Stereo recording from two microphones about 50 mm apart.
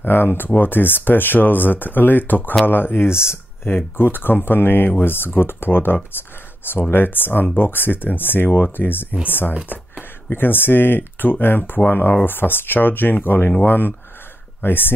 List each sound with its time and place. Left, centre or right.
0.0 s speech: left
9.7 s speech: right
10.3 s speech: left